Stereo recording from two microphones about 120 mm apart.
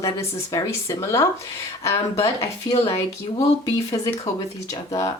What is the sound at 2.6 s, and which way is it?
Speech, 50° left (ahead or behind).